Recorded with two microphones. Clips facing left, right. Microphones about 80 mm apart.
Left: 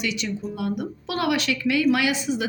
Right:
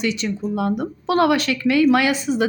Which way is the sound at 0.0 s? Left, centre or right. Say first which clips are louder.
Right 5 dB; right.